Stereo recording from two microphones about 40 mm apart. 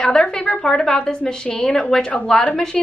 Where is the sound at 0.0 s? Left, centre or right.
Left.